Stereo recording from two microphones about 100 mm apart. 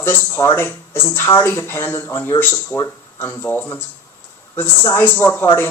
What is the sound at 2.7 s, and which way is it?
Speech, 30° left (ahead or behind).